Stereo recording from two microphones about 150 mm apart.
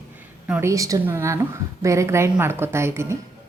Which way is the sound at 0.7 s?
20° right (ahead or behind).